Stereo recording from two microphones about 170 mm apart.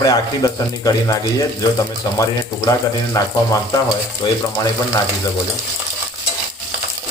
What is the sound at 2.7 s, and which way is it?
Speech, 20° left (ahead or behind).